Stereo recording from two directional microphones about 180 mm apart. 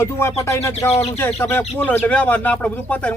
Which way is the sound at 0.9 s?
35° left (ahead or behind).